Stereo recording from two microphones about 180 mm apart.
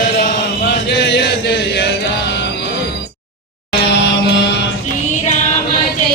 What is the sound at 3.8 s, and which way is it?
Mantra, 70° left (ahead or behind).